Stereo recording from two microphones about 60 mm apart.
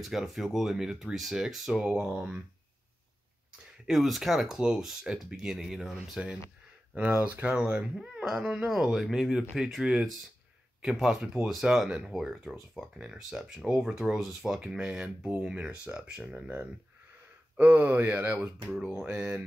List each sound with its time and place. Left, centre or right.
0.0 s speech: centre
3.9 s speech: centre
7.0 s speech: right; by 12.9 s centre
12.9 s speech: centre
14.8 s speech: centre
17.6 s speech: right
18.7 s speech: centre
19.0 s speech: right